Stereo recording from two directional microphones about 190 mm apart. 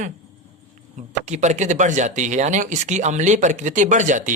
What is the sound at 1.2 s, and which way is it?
Speech, 40° right (ahead or behind).